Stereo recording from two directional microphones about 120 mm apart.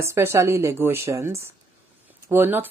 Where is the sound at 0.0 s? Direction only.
20° right (ahead or behind).